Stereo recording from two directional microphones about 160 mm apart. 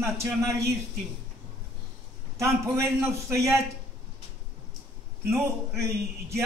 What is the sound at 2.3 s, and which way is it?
A man's voice, 15° right (ahead or behind).